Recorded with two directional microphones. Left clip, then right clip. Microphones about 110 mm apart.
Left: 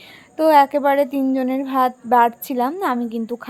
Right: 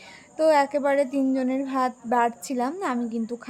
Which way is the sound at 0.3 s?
30° left (ahead or behind).